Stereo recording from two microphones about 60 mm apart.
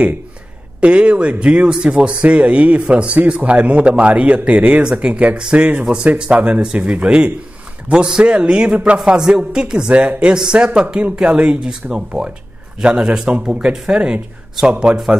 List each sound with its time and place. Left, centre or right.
0.7 s a man's voice: right